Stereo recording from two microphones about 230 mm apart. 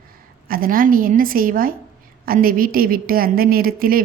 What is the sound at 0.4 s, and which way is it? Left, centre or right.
A woman's voice, right.